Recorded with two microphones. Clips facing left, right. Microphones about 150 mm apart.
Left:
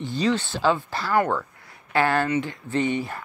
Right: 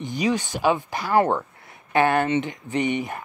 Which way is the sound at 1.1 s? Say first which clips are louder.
Right 3 dB; 30° right (ahead or behind).